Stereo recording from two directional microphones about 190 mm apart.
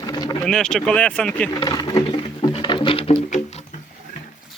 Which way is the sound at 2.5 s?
25° left (ahead or behind).